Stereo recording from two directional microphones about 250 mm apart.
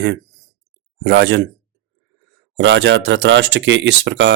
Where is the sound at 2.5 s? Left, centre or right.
Right.